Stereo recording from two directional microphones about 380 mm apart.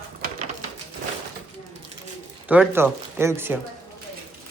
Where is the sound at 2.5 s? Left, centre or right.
Centre.